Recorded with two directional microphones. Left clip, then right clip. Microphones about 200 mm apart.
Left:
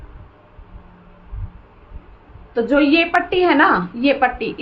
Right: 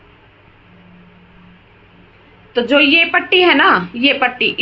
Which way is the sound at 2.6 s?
15° right (ahead or behind).